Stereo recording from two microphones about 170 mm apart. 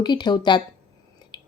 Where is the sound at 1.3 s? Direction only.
25° left (ahead or behind).